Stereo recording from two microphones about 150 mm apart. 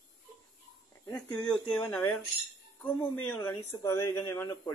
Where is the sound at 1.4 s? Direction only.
5° left (ahead or behind).